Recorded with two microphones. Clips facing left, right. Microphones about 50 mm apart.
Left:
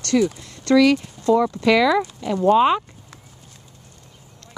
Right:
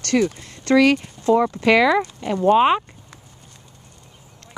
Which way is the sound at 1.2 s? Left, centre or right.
Right.